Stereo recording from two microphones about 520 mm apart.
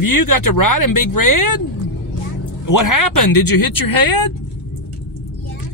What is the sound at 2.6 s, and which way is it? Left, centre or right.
Speech, left.